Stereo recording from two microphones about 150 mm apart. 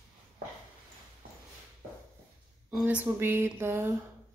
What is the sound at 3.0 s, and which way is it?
Speech, 15° right (ahead or behind).